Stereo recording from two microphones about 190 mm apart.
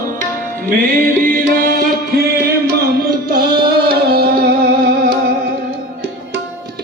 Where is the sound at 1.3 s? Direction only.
50° right (ahead or behind).